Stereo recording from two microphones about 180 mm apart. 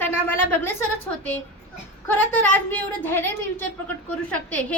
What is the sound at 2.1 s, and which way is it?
A woman's voice, 10° left (ahead or behind).